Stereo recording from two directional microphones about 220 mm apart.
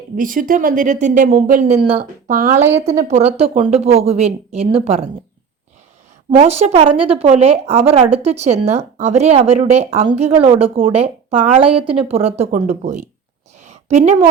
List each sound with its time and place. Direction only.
0.2 s a woman's voice: 40° right (ahead or behind)
6.4 s speech: 30° right (ahead or behind)
13.6 s a sound: 30° right (ahead or behind)